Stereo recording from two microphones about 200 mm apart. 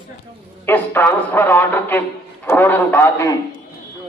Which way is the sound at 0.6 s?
10° left (ahead or behind).